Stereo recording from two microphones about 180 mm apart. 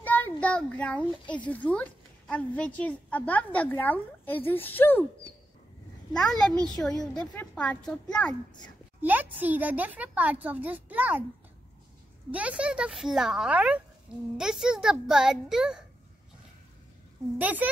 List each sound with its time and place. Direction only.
0.0 s a sound: 10° left (ahead or behind)
1.3 s a woman's voice: 10° left (ahead or behind)
6.1 s a woman's voice: 5° left (ahead or behind)
8.3 s a child's voice: 25° left (ahead or behind)
9.0 s speech: 10° right (ahead or behind)
12.3 s speech: 5° right (ahead or behind)
17.4 s speech: 10° right (ahead or behind)